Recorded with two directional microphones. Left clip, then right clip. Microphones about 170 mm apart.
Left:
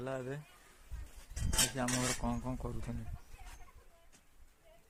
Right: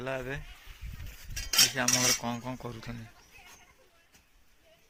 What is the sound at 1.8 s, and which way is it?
Speech, centre (ahead or behind).